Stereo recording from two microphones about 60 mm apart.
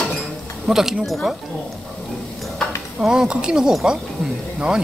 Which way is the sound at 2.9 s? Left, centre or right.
Centre.